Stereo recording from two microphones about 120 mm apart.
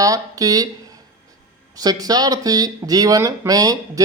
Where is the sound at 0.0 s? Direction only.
30° right (ahead or behind).